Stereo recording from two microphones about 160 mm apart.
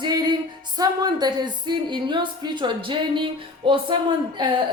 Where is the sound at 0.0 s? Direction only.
30° right (ahead or behind).